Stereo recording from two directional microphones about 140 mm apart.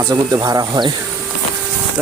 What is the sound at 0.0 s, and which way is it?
Speech, 25° right (ahead or behind).